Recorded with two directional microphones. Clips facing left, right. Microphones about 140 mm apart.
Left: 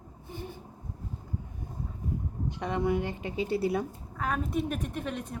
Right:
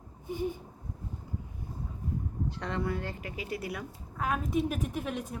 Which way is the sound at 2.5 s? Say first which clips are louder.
Left 6 dB; 15° left (ahead or behind).